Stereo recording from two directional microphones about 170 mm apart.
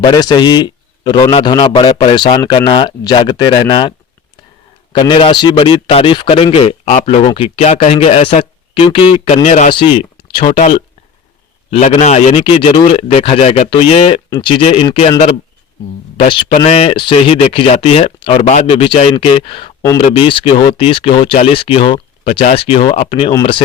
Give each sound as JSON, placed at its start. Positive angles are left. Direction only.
{"t": 0.0, "sound": "a man's voice", "side_deg": 25}
{"t": 16.1, "sound": "speech", "side_deg": 30}